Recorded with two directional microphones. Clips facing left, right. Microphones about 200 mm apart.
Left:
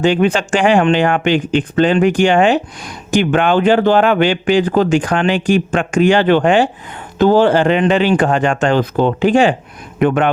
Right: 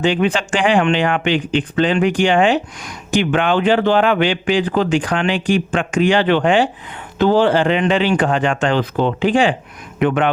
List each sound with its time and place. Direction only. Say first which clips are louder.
0.0 s speech: left 3 dB; 45° left (ahead or behind)